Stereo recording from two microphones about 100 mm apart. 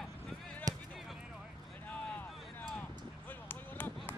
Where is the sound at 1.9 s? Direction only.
20° left (ahead or behind).